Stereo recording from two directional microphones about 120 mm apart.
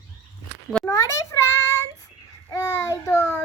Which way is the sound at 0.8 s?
30° left (ahead or behind).